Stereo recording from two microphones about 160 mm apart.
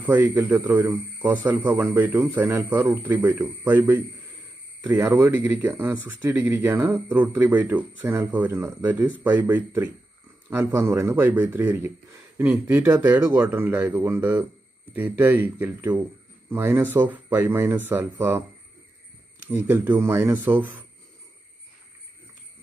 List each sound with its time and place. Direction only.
0.0 s speech: 15° right (ahead or behind)
19.4 s speech: 15° right (ahead or behind)